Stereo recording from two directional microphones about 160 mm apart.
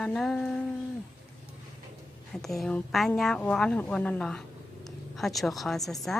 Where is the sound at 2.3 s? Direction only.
Centre (ahead or behind).